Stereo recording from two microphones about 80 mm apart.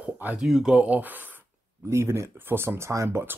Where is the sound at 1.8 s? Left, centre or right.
Right.